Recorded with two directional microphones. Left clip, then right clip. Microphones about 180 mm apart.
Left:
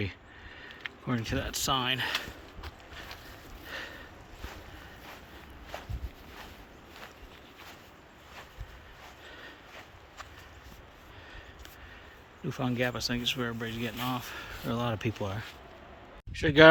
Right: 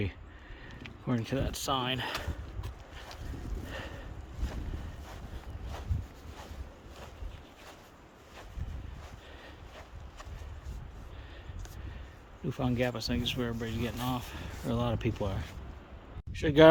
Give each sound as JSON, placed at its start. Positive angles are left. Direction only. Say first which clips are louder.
{"t": 1.0, "sound": "speech", "louder": "even", "side_deg": -15}
{"t": 3.7, "sound": "a sound", "louder": "left 3 dB", "side_deg": -15}
{"t": 12.5, "sound": "speech", "louder": "left 1 dB", "side_deg": -10}